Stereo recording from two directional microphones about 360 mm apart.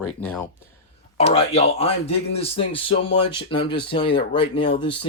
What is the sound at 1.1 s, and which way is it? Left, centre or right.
Speech, centre.